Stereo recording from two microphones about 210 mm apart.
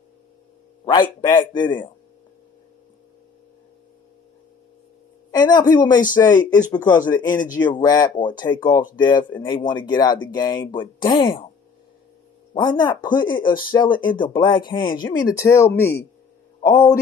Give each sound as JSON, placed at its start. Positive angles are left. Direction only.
{"t": 0.8, "sound": "speech", "side_deg": 20}
{"t": 5.3, "sound": "speech", "side_deg": 20}
{"t": 12.5, "sound": "speech", "side_deg": 20}